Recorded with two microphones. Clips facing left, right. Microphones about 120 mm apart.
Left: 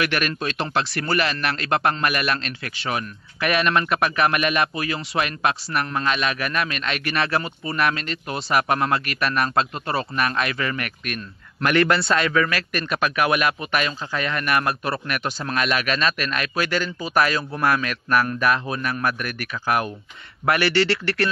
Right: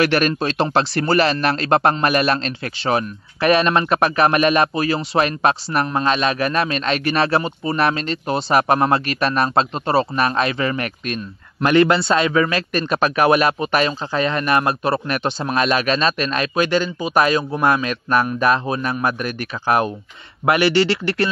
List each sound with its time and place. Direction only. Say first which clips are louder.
0.0 s a man's voice: right 7 dB; 35° right (ahead or behind)